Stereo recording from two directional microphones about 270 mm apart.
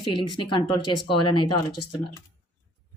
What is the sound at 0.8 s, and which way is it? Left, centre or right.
Speech, left.